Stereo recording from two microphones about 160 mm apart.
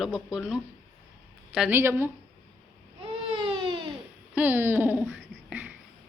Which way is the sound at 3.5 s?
35° right (ahead or behind).